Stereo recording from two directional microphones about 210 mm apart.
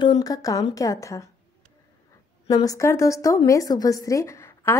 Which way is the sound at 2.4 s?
15° left (ahead or behind).